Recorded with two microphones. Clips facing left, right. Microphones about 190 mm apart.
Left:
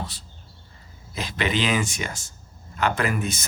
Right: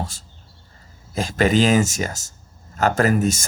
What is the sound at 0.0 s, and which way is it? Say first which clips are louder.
Speech: right 4 dB; 45° right (ahead or behind).